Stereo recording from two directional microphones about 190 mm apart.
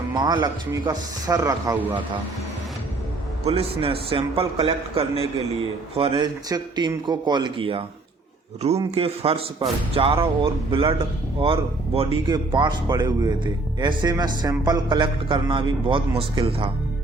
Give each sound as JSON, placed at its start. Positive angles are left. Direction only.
{"t": 0.1, "sound": "speech", "side_deg": -20}
{"t": 3.4, "sound": "a man's voice", "side_deg": -30}